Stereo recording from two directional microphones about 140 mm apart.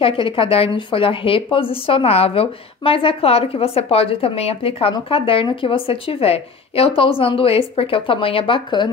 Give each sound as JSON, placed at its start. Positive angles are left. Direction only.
{"t": 0.0, "sound": "a woman's voice", "side_deg": 40}